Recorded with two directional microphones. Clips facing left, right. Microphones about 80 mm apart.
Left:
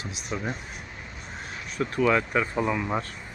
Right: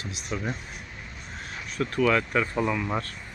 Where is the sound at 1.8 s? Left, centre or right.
Centre.